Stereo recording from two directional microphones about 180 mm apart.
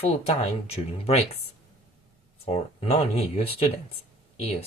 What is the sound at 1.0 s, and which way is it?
Speech, 35° left (ahead or behind).